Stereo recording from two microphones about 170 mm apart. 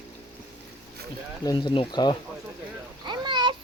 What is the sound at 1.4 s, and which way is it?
Speech, 25° left (ahead or behind).